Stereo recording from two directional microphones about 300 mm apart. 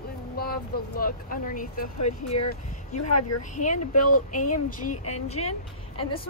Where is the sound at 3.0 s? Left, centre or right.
Left.